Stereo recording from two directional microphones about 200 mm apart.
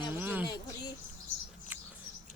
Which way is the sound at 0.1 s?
10° right (ahead or behind).